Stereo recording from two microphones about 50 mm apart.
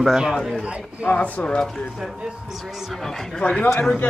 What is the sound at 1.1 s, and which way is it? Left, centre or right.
Speech, left.